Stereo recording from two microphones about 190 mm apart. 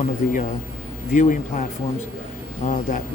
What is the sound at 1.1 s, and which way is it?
Speech, 40° left (ahead or behind).